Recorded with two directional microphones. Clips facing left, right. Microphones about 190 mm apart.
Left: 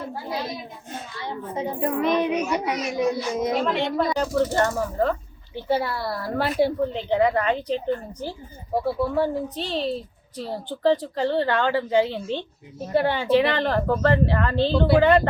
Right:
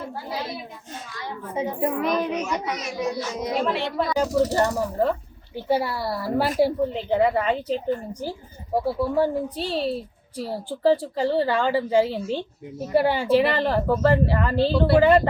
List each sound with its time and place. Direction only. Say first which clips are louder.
1.1 s a sound: left 2 dB; 30° left (ahead or behind)
1.8 s speech: left 2 dB; 5° right (ahead or behind)
2.3 s a child's voice: left 3 dB; 15° left (ahead or behind)
3.6 s speech: left 1 dB; 5° right (ahead or behind)